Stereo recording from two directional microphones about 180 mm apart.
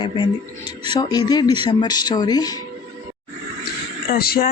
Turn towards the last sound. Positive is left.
turn(degrees=55)  # may be behind; listen again after turning